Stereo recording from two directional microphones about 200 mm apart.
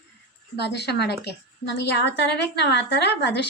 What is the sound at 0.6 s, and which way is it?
A woman's voice, 55° left (ahead or behind).